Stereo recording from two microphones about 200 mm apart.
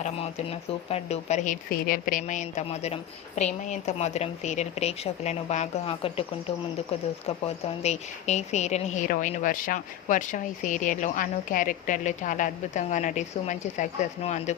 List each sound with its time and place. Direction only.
0.0 s a woman's voice: 30° left (ahead or behind)
1.7 s a woman's voice: 45° left (ahead or behind); by 6.2 s 30° left (ahead or behind)
7.3 s a woman's voice: 30° left (ahead or behind)